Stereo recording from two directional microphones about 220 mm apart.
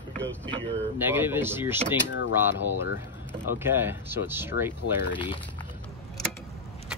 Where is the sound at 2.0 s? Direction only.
55° left (ahead or behind).